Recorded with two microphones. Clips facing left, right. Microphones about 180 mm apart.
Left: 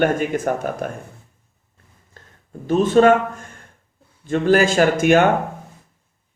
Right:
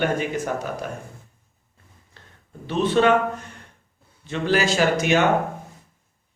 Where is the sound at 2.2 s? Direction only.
45° left (ahead or behind).